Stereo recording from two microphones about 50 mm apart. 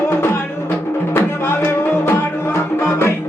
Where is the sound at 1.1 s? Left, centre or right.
Left.